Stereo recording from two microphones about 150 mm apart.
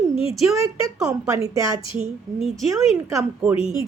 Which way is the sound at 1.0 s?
20° right (ahead or behind).